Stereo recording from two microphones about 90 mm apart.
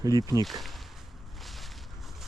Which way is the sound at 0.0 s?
45° right (ahead or behind).